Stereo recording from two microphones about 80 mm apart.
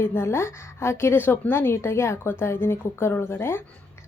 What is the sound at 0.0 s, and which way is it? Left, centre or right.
A woman's voice, left.